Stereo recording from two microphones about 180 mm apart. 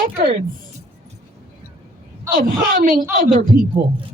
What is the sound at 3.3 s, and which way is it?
Speech, 35° right (ahead or behind).